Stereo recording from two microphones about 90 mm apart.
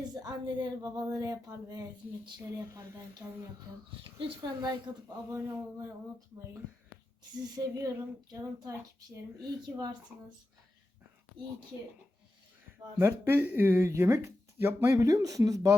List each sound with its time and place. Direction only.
0.1 s a sound: 50° right (ahead or behind)
0.9 s a woman's voice: 40° right (ahead or behind)
4.4 s a woman's voice: 40° right (ahead or behind)
7.5 s a woman's voice: 45° right (ahead or behind)
13.0 s speech: 25° right (ahead or behind)
14.9 s a woman's voice: 40° right (ahead or behind)